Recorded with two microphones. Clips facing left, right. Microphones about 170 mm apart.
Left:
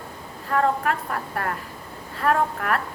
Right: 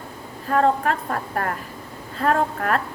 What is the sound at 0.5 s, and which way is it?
A woman's voice, 30° right (ahead or behind).